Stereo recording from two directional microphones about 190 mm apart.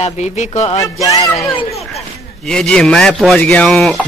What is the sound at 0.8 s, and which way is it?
Speech, 20° left (ahead or behind).